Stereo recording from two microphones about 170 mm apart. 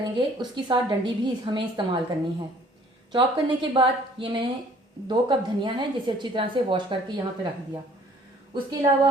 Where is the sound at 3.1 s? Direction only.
30° right (ahead or behind).